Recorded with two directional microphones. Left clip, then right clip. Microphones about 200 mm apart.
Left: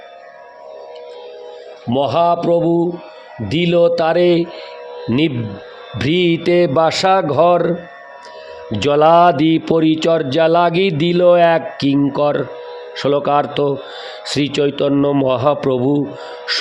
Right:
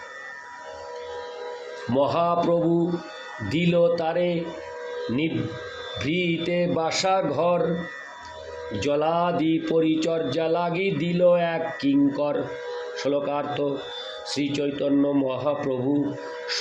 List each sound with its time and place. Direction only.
2.0 s a man's voice: 45° left (ahead or behind)
8.8 s a man's voice: 55° left (ahead or behind)
16.5 s a sound: 50° left (ahead or behind)